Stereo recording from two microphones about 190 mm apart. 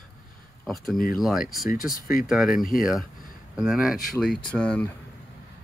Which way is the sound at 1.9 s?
50° left (ahead or behind).